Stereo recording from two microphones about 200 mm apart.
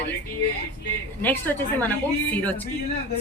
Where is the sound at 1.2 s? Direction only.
10° left (ahead or behind).